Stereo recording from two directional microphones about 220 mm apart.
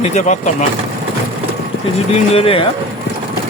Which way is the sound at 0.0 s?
30° left (ahead or behind).